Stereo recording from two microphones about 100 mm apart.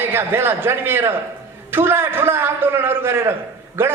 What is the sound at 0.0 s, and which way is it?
A man's voice, 25° right (ahead or behind).